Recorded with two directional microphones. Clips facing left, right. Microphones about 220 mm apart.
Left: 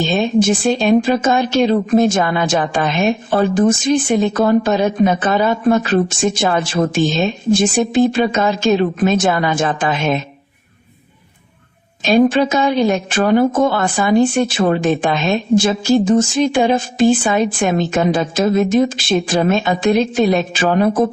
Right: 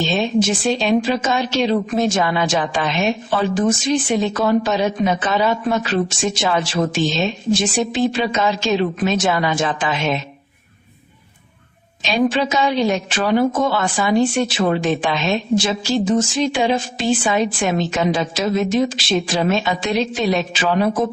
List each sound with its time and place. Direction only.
0.1 s speech: 50° left (ahead or behind)
12.0 s speech: 50° left (ahead or behind)
16.4 s speech: 50° left (ahead or behind)